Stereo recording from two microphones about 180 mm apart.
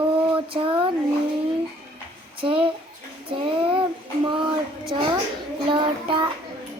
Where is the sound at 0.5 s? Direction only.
30° right (ahead or behind).